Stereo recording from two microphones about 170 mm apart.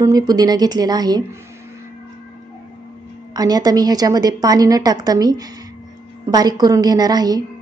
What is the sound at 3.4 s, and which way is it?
A woman's voice, 20° right (ahead or behind).